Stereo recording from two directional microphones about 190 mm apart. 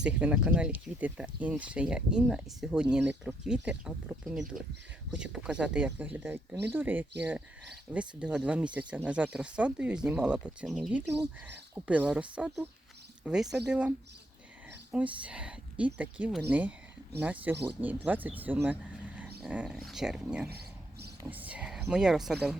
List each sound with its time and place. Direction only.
0.0 s speech: 5° right (ahead or behind)
14.9 s speech: 5° right (ahead or behind)
20.5 s a sound: 55° right (ahead or behind)
21.2 s speech: 10° right (ahead or behind)